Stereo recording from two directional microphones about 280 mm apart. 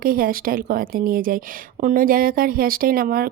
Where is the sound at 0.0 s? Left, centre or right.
Right.